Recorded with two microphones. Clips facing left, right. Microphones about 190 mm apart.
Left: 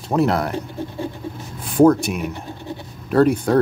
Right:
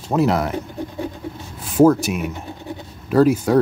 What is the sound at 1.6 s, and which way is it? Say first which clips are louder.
Speech: even; centre (ahead or behind).